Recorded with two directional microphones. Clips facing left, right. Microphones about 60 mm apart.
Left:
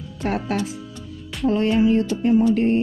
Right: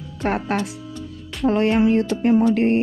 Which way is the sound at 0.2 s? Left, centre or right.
Right.